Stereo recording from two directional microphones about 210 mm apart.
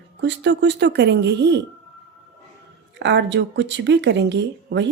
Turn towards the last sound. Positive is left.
turn(degrees=-55)  # may be behind; listen again after turning